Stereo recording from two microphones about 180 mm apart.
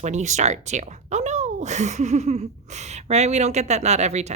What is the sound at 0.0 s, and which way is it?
Speech, 40° right (ahead or behind).